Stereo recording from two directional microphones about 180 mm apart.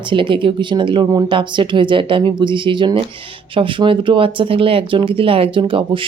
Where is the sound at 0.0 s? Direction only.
25° right (ahead or behind).